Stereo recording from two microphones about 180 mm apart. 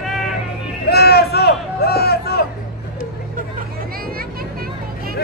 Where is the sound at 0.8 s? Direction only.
60° left (ahead or behind).